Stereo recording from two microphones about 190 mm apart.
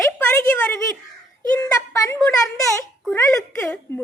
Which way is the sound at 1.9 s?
15° left (ahead or behind).